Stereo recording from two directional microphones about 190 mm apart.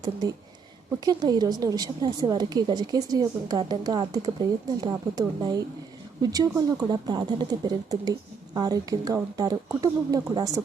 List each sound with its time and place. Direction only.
0.9 s a woman's voice: 20° right (ahead or behind)